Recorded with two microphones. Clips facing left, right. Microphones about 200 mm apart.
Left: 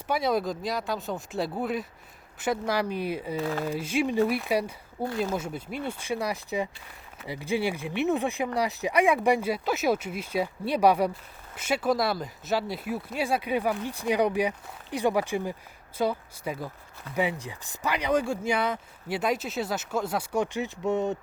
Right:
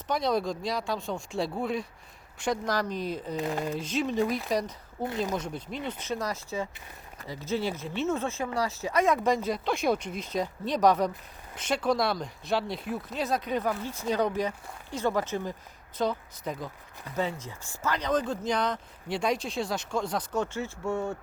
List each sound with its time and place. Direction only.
0.1 s speech: 5° left (ahead or behind)
3.3 s speech: 15° right (ahead or behind)
3.6 s speech: 10° left (ahead or behind)